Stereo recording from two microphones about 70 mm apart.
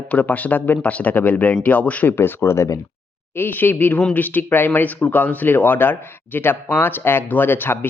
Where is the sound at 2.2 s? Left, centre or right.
Left.